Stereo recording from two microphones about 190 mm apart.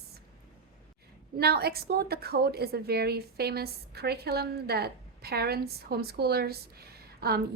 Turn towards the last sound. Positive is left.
turn(degrees=-55)  # may be behind; listen again after turning